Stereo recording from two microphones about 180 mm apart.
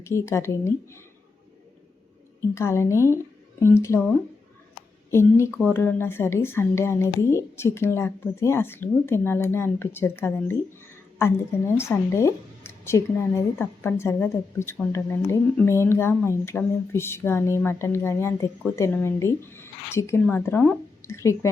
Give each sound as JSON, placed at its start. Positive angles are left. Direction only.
{"t": 0.0, "sound": "speech", "side_deg": 15}
{"t": 2.6, "sound": "speech", "side_deg": 15}
{"t": 5.1, "sound": "speech", "side_deg": 15}
{"t": 11.8, "sound": "speech", "side_deg": 15}